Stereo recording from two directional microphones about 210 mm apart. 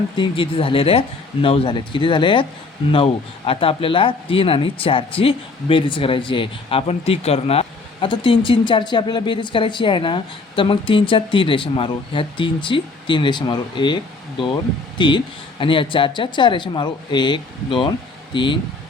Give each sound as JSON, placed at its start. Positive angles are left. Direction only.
{"t": 0.2, "sound": "speech", "side_deg": 25}